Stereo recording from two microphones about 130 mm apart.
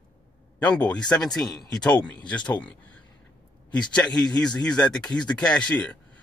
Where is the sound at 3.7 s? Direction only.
5° left (ahead or behind).